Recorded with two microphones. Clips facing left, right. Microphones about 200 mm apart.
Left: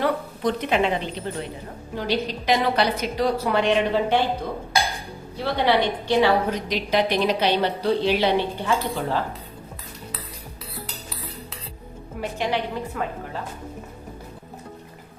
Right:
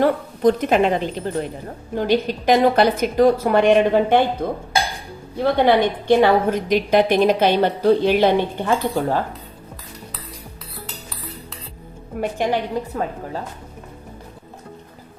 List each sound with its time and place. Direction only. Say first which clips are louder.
0.0 s a woman's voice: right 7 dB; 45° right (ahead or behind)
5.4 s a woman's voice: right 5 dB; 50° right (ahead or behind)
12.2 s a woman's voice: right 4 dB; 45° right (ahead or behind)